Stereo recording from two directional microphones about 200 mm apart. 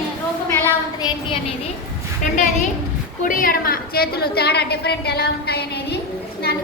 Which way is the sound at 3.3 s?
45° left (ahead or behind).